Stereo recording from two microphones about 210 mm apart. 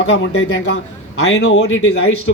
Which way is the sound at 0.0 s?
65° left (ahead or behind).